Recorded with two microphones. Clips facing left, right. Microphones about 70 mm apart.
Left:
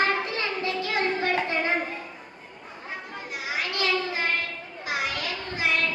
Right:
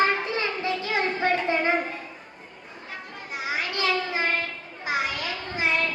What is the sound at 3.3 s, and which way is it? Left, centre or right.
Children playing, right.